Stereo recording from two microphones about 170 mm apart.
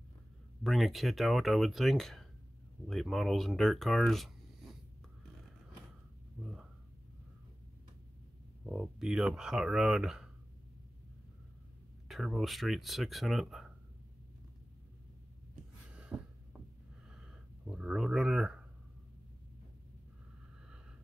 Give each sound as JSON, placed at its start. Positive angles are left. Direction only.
{"t": 0.7, "sound": "speech", "side_deg": 0}
{"t": 6.4, "sound": "a sound", "side_deg": 0}
{"t": 8.6, "sound": "speech", "side_deg": -5}
{"t": 12.1, "sound": "speech", "side_deg": 0}
{"t": 16.1, "sound": "heart sounds", "side_deg": -5}
{"t": 17.1, "sound": "a sound", "side_deg": -5}